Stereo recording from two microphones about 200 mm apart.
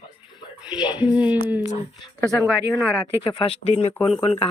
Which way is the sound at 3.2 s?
25° left (ahead or behind).